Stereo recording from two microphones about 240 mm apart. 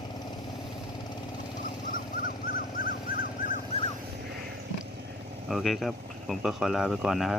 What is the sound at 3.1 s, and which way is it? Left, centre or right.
Dog, left.